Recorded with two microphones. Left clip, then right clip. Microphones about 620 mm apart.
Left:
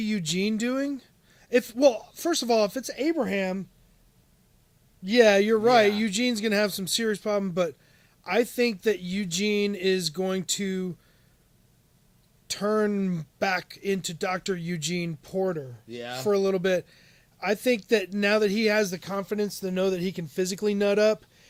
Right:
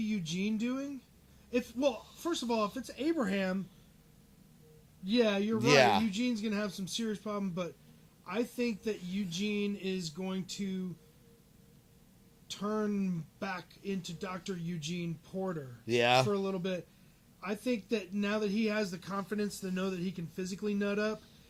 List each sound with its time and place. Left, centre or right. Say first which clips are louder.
0.0 s speech: left 9 dB; left
5.0 s speech: left 11 dB; left
12.5 s speech: left 10 dB; left
15.9 s speech: right 11 dB; right
16.3 s speech: left 11 dB; left